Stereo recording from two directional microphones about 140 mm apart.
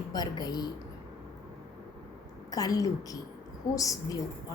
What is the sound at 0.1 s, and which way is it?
Speech, 30° left (ahead or behind).